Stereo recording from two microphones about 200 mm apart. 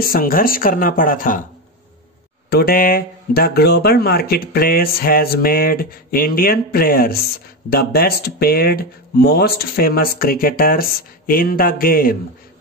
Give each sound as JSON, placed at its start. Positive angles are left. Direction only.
{"t": 0.0, "sound": "speech", "side_deg": 45}
{"t": 2.5, "sound": "speech", "side_deg": 50}